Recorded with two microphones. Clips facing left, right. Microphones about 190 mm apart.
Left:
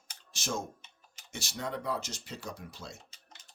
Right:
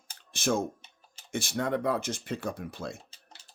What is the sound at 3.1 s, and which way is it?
Typing, 30° right (ahead or behind).